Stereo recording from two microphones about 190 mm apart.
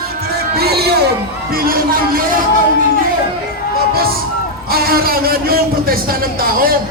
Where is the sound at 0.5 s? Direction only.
55° right (ahead or behind).